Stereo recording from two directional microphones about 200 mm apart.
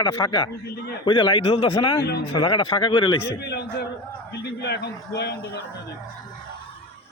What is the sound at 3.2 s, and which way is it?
A man's voice, 55° left (ahead or behind).